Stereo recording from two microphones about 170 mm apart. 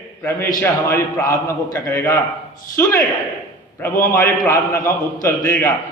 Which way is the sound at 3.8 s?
15° left (ahead or behind).